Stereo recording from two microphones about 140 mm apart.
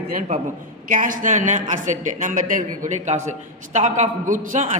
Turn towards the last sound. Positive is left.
turn(degrees=-60)  # may be behind; listen again after turning